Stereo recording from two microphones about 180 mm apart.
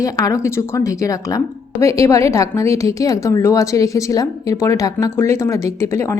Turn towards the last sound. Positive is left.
turn(degrees=15)  # may be behind; listen again after turning